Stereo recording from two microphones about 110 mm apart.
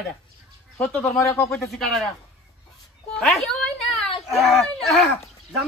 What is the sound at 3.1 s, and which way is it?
A woman's voice, centre (ahead or behind).